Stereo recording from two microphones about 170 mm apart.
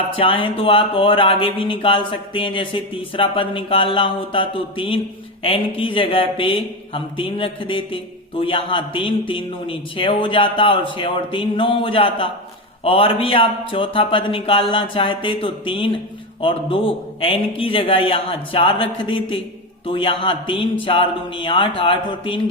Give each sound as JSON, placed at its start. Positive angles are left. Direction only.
{"t": 0.2, "sound": "speech", "side_deg": 30}